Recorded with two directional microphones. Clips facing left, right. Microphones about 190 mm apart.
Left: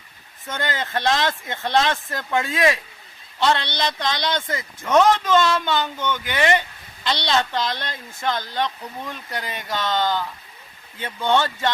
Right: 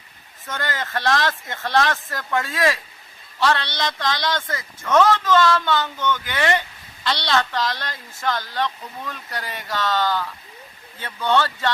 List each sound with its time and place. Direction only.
0.4 s a man's voice: 20° left (ahead or behind)